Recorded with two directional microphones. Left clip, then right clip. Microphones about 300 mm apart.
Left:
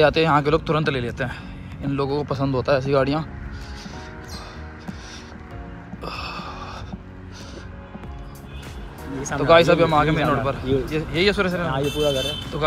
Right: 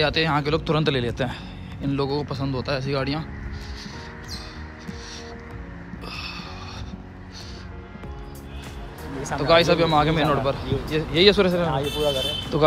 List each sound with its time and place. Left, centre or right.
0.0 s a man's voice: centre
6.0 s music: centre
9.4 s a man's voice: centre
11.7 s speech: left
12.5 s a man's voice: centre